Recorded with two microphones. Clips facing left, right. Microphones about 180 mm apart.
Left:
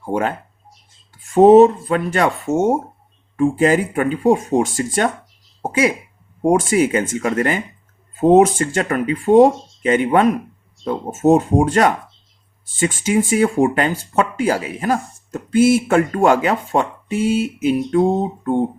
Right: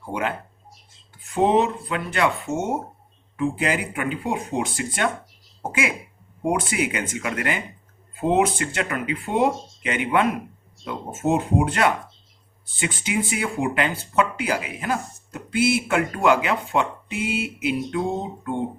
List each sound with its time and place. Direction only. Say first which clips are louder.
0.1 s speech: left 6 dB; 45° left (ahead or behind)
6.4 s speech: left 8 dB; 45° left (ahead or behind)